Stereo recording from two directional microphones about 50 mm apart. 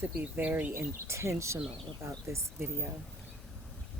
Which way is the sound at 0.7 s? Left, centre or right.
Right.